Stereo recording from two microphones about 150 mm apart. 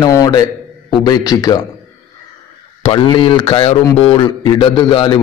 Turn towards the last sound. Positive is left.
turn(degrees=35)  # may be behind; listen again after turning